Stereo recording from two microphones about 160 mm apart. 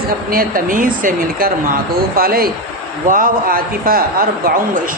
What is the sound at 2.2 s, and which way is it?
Speech, 70° right (ahead or behind).